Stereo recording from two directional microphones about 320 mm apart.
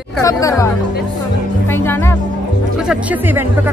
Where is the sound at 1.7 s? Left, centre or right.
Centre.